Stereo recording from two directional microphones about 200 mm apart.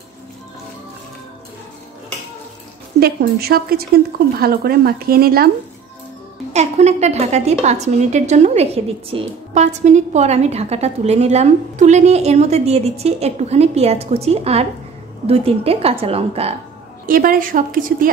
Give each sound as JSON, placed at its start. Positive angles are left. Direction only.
{"t": 3.0, "sound": "a woman's voice", "side_deg": -50}
{"t": 6.5, "sound": "a woman's voice", "side_deg": -35}
{"t": 17.0, "sound": "a woman's voice", "side_deg": -45}